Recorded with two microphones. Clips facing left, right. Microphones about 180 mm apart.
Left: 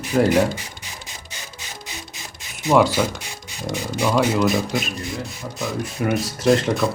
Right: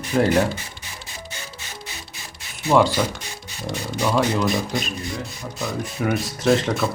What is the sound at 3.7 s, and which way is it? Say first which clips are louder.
Speech: left 1 dB; 15° left (ahead or behind).